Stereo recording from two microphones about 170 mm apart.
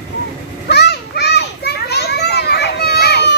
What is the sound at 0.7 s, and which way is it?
Children playing, 75° left (ahead or behind).